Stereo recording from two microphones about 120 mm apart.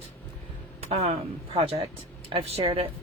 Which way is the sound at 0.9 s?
60° right (ahead or behind).